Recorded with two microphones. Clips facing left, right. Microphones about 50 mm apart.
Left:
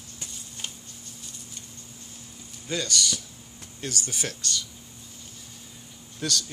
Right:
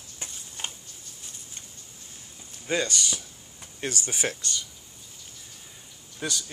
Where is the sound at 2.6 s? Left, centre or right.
Right.